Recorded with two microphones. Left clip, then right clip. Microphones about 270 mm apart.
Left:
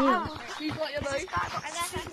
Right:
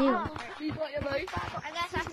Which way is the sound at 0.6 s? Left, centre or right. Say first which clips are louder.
Left 2 dB; left.